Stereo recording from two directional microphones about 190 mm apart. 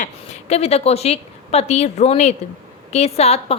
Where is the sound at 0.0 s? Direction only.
35° left (ahead or behind).